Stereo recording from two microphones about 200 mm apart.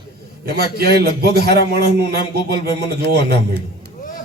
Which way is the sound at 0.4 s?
50° right (ahead or behind).